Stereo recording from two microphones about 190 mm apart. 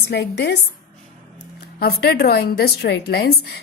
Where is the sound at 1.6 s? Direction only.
55° left (ahead or behind).